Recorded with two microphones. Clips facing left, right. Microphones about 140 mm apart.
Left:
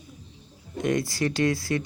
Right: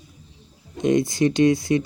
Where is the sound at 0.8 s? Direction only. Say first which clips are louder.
Right 6 dB; 20° right (ahead or behind).